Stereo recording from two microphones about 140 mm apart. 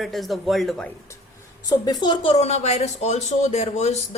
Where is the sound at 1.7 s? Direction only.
30° left (ahead or behind).